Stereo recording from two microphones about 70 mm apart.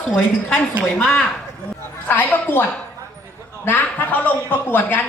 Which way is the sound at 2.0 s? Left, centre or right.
Left.